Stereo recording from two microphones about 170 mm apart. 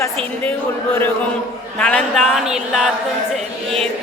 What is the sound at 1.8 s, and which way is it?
Speech, 5° left (ahead or behind).